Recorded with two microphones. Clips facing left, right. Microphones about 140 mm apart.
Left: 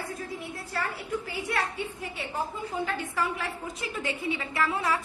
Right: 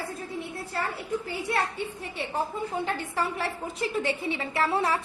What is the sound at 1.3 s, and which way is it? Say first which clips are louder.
Speech: right 3 dB; 30° right (ahead or behind).